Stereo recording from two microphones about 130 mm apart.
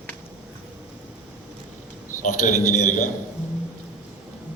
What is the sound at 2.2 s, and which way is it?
Speech, 70° left (ahead or behind).